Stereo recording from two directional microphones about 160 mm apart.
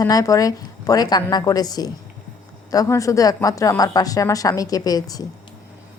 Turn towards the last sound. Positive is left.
turn(degrees=25)  # may be behind; listen again after turning